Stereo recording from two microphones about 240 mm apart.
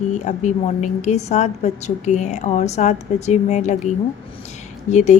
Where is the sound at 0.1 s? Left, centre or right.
Left.